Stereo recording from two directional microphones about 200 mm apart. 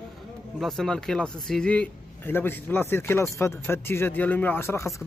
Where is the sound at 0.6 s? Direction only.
Centre (ahead or behind).